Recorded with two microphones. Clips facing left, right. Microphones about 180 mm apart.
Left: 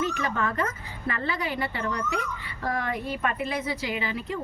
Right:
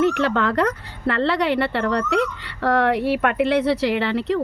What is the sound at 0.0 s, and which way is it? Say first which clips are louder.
Speech: right 9 dB; 70° right (ahead or behind).